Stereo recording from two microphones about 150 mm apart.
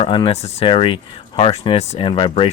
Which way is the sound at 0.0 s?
35° left (ahead or behind).